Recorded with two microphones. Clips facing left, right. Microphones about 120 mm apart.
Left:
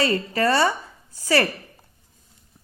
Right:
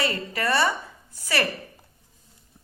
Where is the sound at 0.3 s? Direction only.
25° left (ahead or behind).